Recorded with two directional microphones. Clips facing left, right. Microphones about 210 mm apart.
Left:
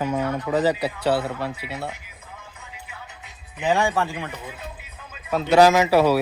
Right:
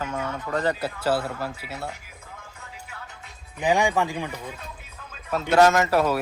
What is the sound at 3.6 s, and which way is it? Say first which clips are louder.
Speech: even; 15° right (ahead or behind).